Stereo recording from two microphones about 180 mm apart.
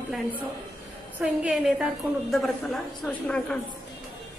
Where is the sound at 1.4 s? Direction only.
5° right (ahead or behind).